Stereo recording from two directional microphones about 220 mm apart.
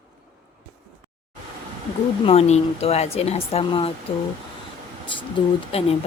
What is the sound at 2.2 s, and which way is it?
Speech, 30° left (ahead or behind).